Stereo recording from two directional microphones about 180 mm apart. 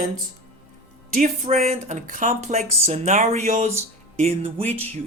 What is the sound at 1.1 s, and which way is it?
Speech, 40° right (ahead or behind).